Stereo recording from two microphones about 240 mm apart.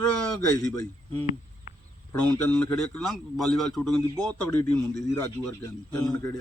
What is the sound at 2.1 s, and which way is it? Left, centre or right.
A man's voice, centre.